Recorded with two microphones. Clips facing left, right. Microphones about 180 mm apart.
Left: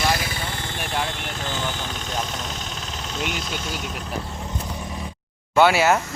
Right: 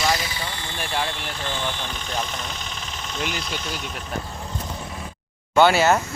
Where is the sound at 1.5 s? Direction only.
40° left (ahead or behind).